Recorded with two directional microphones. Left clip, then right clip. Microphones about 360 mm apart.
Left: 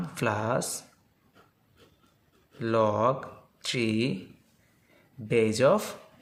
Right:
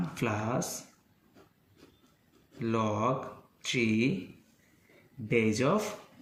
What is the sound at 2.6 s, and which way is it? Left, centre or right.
Speech, left.